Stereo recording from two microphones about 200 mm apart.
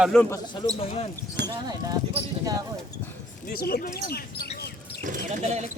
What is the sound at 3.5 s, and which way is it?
Speech, 50° left (ahead or behind).